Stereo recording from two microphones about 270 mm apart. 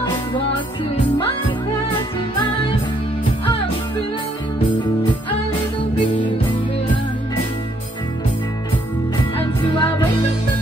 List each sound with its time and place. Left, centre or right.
9.4 s music: centre